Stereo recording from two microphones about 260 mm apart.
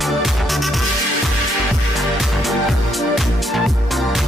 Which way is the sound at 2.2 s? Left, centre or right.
Centre.